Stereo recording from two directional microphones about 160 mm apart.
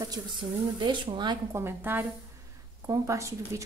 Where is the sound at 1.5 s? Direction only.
15° right (ahead or behind).